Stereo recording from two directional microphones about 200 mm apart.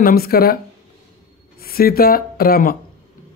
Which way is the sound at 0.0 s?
50° left (ahead or behind).